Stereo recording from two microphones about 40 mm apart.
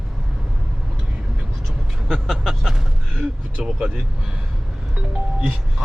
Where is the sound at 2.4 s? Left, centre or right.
Centre.